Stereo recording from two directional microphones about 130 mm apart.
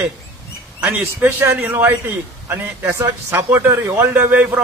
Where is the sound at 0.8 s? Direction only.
20° right (ahead or behind).